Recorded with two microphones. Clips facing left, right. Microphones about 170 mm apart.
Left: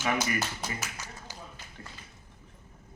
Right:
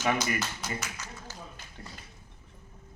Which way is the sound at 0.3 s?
15° left (ahead or behind).